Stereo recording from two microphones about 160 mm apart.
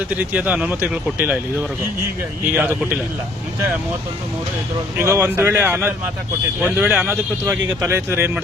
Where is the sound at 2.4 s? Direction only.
10° right (ahead or behind).